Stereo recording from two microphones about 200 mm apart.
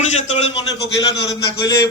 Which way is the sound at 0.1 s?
30° left (ahead or behind).